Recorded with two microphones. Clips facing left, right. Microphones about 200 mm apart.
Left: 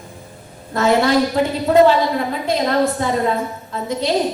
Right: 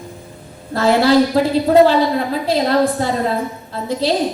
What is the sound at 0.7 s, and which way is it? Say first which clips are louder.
A woman's voice: right 2 dB; 30° right (ahead or behind).